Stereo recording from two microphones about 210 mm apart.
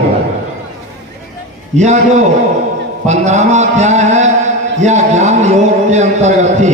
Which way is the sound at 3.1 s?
35° right (ahead or behind).